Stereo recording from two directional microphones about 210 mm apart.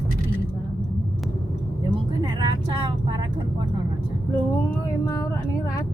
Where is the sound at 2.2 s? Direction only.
20° right (ahead or behind).